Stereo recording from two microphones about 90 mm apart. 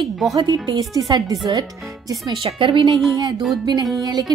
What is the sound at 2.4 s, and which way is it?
Speech, 80° right.